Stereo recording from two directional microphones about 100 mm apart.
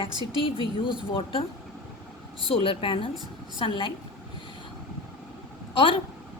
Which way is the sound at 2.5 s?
65° left (ahead or behind).